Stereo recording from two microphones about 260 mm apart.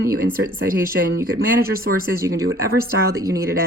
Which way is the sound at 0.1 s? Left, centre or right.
Right.